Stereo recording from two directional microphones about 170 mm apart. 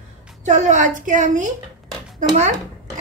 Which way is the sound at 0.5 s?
45° right (ahead or behind).